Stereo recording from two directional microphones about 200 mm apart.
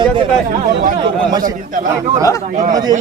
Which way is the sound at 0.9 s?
20° right (ahead or behind).